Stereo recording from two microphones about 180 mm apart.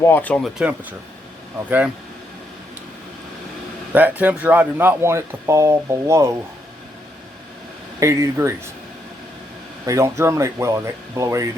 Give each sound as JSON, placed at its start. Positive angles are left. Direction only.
{"t": 0.0, "sound": "speech", "side_deg": 10}
{"t": 0.6, "sound": "speech", "side_deg": -10}
{"t": 3.9, "sound": "speech", "side_deg": -10}
{"t": 7.9, "sound": "speech", "side_deg": -15}
{"t": 9.8, "sound": "speech", "side_deg": -15}